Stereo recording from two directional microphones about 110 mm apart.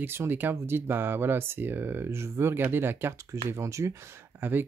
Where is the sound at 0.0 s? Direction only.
20° right (ahead or behind).